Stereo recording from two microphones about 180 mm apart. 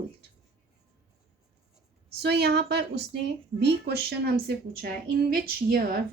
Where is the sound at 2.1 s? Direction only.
65° right (ahead or behind).